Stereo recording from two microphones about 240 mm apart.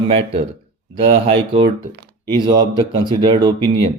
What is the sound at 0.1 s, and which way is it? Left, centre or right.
Speech, right.